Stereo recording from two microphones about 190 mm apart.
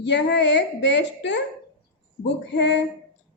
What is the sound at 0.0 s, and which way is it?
A woman's voice, 65° left (ahead or behind).